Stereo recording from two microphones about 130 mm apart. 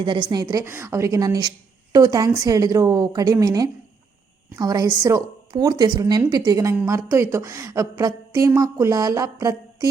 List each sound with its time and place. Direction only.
0.0 s a woman's voice: 35° right (ahead or behind)